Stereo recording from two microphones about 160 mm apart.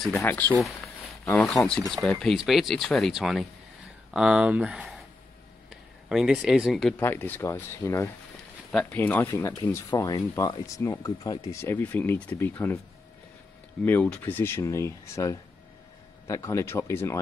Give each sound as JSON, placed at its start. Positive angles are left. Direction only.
{"t": 0.2, "sound": "speech", "side_deg": 10}
{"t": 0.6, "sound": "speech", "side_deg": 0}
{"t": 1.7, "sound": "speech", "side_deg": 0}
{"t": 7.0, "sound": "speech", "side_deg": 15}
{"t": 13.8, "sound": "speech", "side_deg": 10}